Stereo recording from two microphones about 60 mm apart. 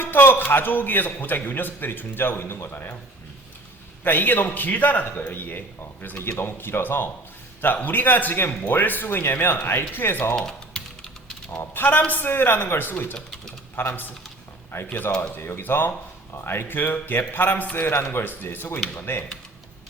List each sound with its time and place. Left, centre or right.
0.0 s a man's voice: left
4.0 s a man's voice: left
6.1 s a man's voice: left
10.3 s typing: centre
11.5 s a man's voice: left
17.7 s a man's voice: left